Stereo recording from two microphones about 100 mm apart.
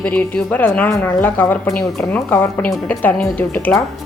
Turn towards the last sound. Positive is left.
turn(degrees=20)  # may be behind; listen again after turning